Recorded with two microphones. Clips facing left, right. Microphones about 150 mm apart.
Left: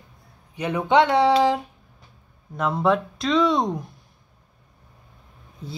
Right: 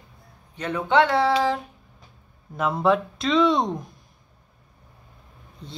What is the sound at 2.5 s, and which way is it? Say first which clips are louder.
Speech: even; centre (ahead or behind).